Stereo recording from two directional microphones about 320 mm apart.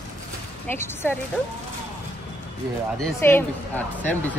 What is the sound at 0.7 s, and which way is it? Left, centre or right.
Speech, centre.